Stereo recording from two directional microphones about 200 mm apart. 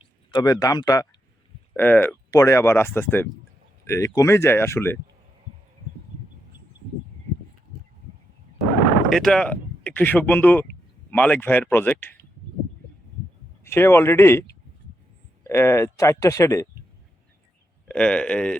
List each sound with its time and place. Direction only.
0.0 s speech: 20° left (ahead or behind)
9.0 s speech: centre (ahead or behind)
13.7 s speech: 10° left (ahead or behind)
15.4 s speech: 15° left (ahead or behind)
17.8 s speech: 5° left (ahead or behind)